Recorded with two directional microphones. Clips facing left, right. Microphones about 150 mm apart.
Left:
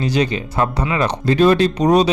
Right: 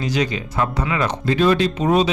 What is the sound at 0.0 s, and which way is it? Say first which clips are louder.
A man's voice: left 3 dB; 30° left (ahead or behind).